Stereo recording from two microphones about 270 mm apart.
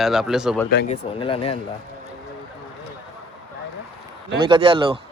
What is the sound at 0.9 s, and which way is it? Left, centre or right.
Speech, centre.